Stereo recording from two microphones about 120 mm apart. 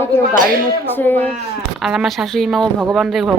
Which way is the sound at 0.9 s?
15° left (ahead or behind).